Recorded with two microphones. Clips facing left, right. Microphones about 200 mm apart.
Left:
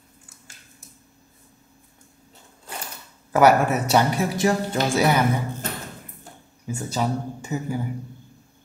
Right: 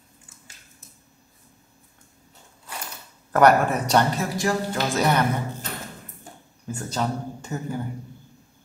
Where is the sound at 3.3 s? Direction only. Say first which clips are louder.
Left 1 dB; 5° left (ahead or behind).